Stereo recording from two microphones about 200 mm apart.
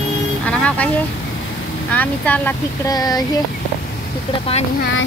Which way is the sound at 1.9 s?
10° left (ahead or behind).